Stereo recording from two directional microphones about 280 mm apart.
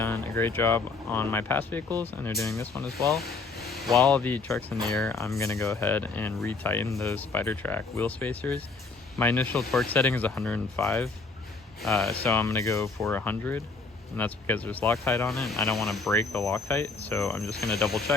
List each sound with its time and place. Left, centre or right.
0.0 s speech: centre